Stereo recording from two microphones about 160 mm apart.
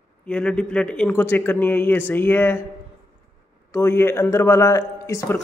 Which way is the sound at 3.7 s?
15° left (ahead or behind).